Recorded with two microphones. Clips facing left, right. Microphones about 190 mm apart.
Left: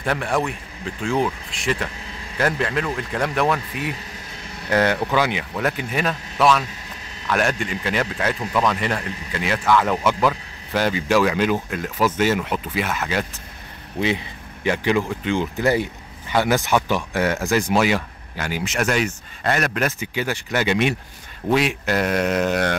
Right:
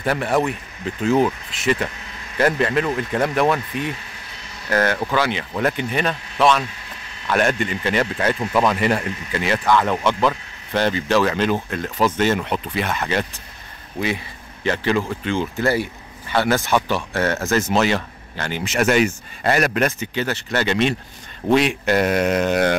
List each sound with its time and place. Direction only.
0.0 s speech: 5° right (ahead or behind)
4.6 s speech: 15° left (ahead or behind)
5.6 s speech: 5° left (ahead or behind)
13.9 s speech: 20° left (ahead or behind); by 22.8 s 5° right (ahead or behind)